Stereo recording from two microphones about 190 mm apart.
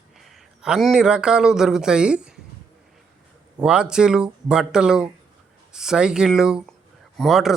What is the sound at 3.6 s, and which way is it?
Speech, 5° right (ahead or behind).